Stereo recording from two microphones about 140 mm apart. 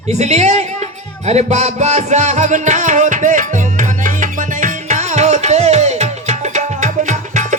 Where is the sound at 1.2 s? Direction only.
50° right (ahead or behind).